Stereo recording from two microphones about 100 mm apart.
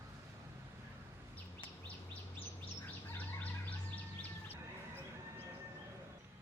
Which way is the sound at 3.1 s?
20° left (ahead or behind).